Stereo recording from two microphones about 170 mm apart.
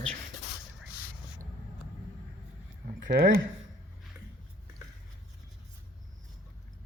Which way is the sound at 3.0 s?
60° right (ahead or behind).